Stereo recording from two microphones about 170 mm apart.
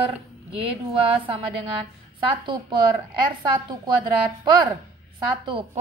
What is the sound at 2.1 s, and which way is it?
Speech, 30° right (ahead or behind).